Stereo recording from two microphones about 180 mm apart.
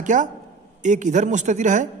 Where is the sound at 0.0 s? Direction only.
45° right (ahead or behind).